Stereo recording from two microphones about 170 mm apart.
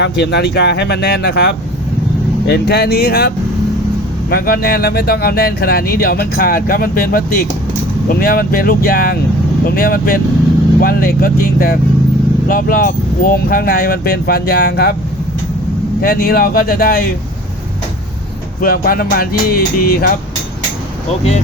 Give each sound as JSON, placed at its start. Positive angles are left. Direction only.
{"t": 0.0, "sound": "speech", "side_deg": 75}
{"t": 16.0, "sound": "speech", "side_deg": 60}
{"t": 18.6, "sound": "speech", "side_deg": 60}